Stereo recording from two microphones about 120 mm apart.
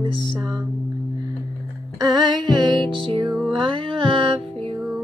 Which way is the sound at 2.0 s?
35° right (ahead or behind).